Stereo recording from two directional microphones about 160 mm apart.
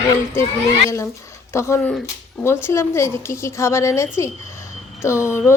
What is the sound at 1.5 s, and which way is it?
Speech, 15° left (ahead or behind).